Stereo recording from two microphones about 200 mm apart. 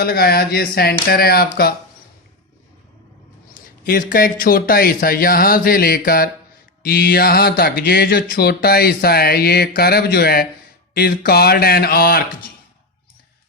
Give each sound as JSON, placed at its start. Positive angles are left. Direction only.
{"t": 0.0, "sound": "speech", "side_deg": 50}
{"t": 3.8, "sound": "speech", "side_deg": 45}